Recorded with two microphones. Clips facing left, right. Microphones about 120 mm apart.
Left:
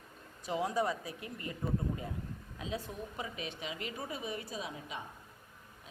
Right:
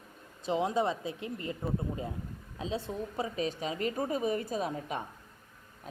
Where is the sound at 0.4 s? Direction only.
25° right (ahead or behind).